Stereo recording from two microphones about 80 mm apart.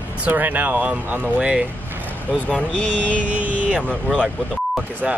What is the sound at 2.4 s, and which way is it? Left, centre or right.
Speech, centre.